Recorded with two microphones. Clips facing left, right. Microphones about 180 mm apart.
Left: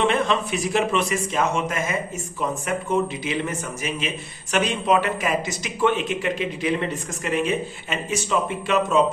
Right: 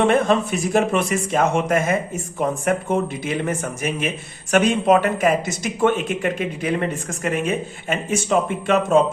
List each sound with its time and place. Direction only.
0.0 s speech: 50° right (ahead or behind)